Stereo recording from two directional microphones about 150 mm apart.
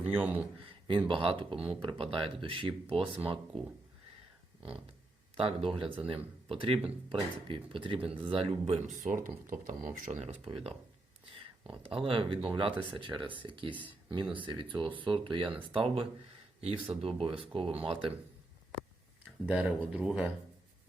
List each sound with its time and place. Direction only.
0.1 s speech: 10° right (ahead or behind)
1.0 s speech: 35° right (ahead or behind)
5.4 s speech: 40° right (ahead or behind)
9.0 s speech: 60° right (ahead or behind); by 10.8 s 40° right (ahead or behind)
11.8 s speech: 40° right (ahead or behind)
19.5 s speech: 10° right (ahead or behind)